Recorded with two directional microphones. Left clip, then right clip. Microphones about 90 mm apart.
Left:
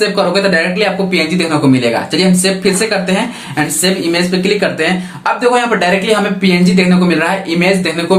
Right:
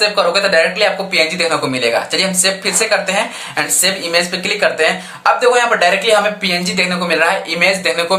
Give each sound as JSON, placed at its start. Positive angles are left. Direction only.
{"t": 0.0, "sound": "speech", "side_deg": -25}